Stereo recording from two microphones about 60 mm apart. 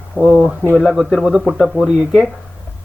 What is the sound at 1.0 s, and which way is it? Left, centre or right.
Speech, centre.